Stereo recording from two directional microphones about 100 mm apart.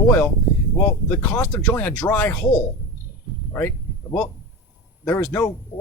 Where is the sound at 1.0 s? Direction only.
15° left (ahead or behind).